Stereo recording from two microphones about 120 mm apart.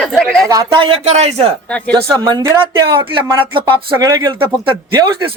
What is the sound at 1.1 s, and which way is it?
Speech, 65° right (ahead or behind).